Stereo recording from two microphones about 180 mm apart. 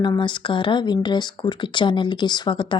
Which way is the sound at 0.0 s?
25° left (ahead or behind).